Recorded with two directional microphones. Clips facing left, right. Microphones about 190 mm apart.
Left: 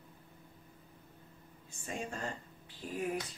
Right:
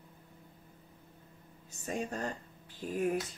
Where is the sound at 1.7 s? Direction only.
40° right (ahead or behind).